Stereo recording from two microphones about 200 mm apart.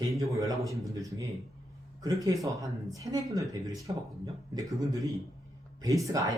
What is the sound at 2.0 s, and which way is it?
Speech, 15° right (ahead or behind).